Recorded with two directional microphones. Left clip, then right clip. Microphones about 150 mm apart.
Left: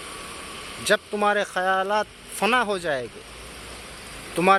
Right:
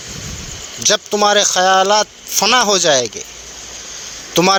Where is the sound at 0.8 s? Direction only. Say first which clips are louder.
Right 8 dB; 45° right (ahead or behind).